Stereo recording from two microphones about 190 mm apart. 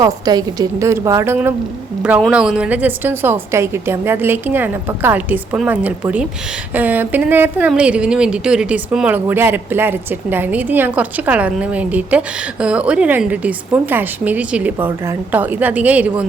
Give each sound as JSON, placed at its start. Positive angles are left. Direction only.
{"t": 0.0, "sound": "a woman's voice", "side_deg": -20}